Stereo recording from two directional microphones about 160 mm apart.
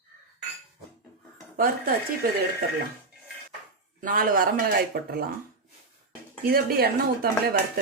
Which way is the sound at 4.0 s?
60° right (ahead or behind).